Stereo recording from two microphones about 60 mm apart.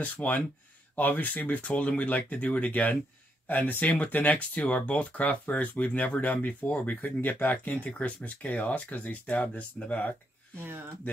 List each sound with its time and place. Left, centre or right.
0.0 s speech: left